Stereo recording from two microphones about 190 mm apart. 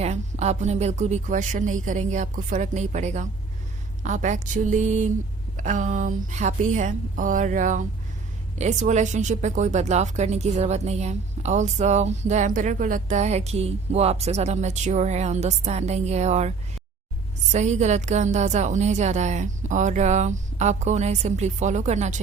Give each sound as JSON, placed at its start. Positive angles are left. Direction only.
{"t": 0.0, "sound": "speech", "side_deg": -35}